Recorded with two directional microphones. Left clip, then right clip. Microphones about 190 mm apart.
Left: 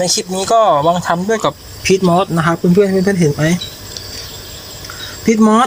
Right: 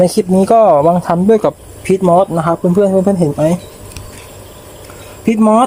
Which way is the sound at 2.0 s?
Centre (ahead or behind).